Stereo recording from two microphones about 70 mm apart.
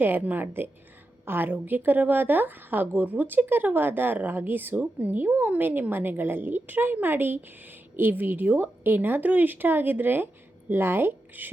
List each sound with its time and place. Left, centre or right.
0.0 s a woman's voice: right